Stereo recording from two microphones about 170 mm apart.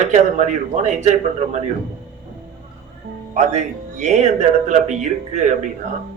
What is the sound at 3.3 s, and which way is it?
Speech, 45° right (ahead or behind).